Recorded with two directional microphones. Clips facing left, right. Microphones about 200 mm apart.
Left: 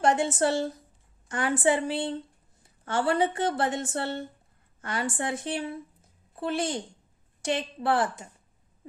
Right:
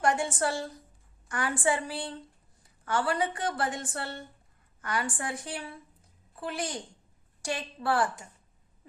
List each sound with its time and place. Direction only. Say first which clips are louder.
0.0 s a woman's voice: left 4 dB; 25° left (ahead or behind)